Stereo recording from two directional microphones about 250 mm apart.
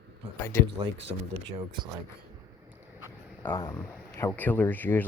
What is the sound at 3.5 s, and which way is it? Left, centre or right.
Speech, centre.